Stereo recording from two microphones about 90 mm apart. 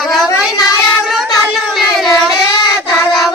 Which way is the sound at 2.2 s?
5° right (ahead or behind).